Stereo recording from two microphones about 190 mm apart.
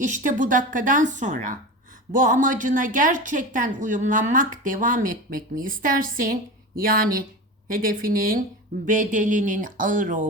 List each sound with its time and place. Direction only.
0.0 s a woman's voice: 40° right (ahead or behind)